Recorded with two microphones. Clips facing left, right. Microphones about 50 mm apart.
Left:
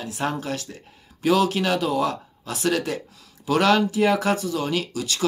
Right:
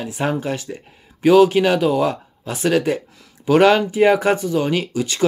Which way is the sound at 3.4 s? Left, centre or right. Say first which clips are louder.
Right 6 dB; right.